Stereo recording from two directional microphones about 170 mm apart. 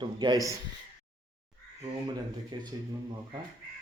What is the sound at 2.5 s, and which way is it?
Speech, 25° right (ahead or behind).